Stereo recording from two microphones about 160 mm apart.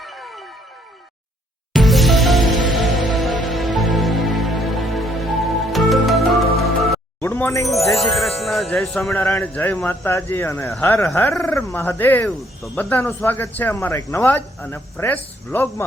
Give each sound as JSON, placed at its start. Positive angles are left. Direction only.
{"t": 0.0, "sound": "music", "side_deg": 0}
{"t": 1.7, "sound": "music", "side_deg": 0}
{"t": 7.2, "sound": "music", "side_deg": 10}
{"t": 7.7, "sound": "a man's voice", "side_deg": 0}